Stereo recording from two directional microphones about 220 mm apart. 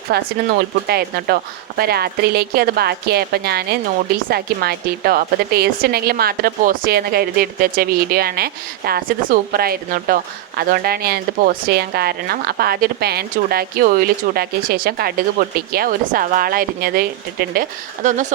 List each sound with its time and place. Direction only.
0.1 s a woman's voice: 45° right (ahead or behind)